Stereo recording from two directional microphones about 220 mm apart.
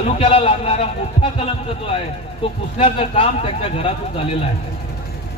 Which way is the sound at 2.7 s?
25° left (ahead or behind).